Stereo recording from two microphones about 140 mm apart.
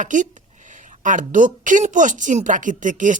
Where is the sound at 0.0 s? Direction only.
65° right (ahead or behind).